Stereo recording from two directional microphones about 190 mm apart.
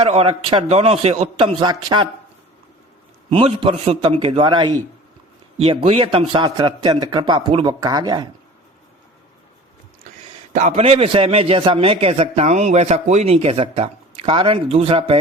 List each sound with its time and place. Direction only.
0.0 s a man's voice: 30° right (ahead or behind)
3.2 s a man's voice: 30° right (ahead or behind)
10.5 s a man's voice: 35° right (ahead or behind)